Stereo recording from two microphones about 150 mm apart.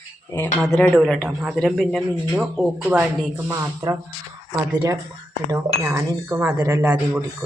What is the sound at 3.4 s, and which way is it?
Speech, 20° right (ahead or behind).